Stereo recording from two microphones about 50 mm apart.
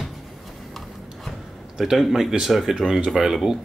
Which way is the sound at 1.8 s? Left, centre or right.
Centre.